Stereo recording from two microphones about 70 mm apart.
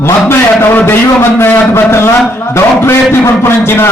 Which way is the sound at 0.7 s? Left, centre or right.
Left.